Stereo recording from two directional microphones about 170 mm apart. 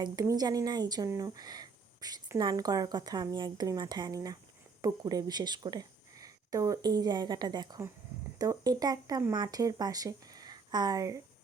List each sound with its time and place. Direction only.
0.0 s speech: 20° right (ahead or behind)